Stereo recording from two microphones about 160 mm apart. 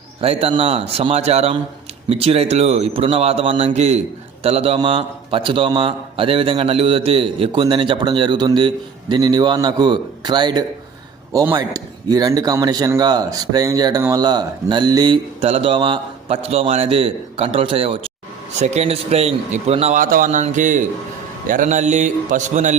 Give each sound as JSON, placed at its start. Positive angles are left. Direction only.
{"t": 0.2, "sound": "a man's voice", "side_deg": -35}
{"t": 15.4, "sound": "a man's voice", "side_deg": -40}
{"t": 20.0, "sound": "a man's voice", "side_deg": -60}